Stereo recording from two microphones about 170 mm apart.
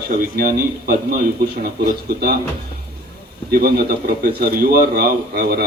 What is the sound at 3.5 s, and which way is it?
Speech, 60° right (ahead or behind).